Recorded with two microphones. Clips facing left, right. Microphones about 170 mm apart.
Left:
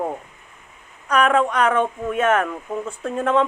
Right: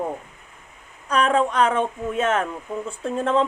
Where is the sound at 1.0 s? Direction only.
30° right (ahead or behind).